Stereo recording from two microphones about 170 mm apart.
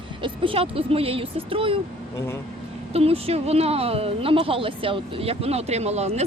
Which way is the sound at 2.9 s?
35° right (ahead or behind).